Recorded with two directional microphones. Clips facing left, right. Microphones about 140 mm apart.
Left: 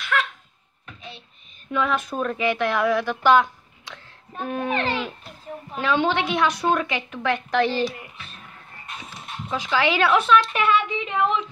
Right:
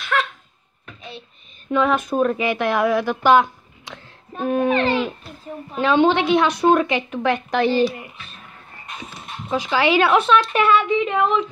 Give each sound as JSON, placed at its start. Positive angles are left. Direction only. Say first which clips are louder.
{"t": 0.0, "sound": "a sound", "louder": "right 3 dB", "side_deg": -30}
{"t": 1.7, "sound": "a woman's voice", "louder": "right 5 dB", "side_deg": -25}
{"t": 2.1, "sound": "speech", "louder": "right 4 dB", "side_deg": -15}
{"t": 3.3, "sound": "a sound", "louder": "right 2 dB", "side_deg": -15}
{"t": 5.8, "sound": "a woman's voice", "louder": "right 6 dB", "side_deg": -25}
{"t": 9.6, "sound": "a woman's voice", "louder": "right 4 dB", "side_deg": -15}
{"t": 10.4, "sound": "speech", "louder": "right 4 dB", "side_deg": -40}